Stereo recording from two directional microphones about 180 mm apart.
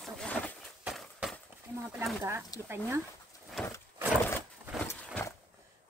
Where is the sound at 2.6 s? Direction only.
15° right (ahead or behind).